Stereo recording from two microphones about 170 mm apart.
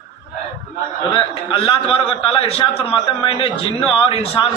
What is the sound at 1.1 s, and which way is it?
A man's voice, 30° left (ahead or behind).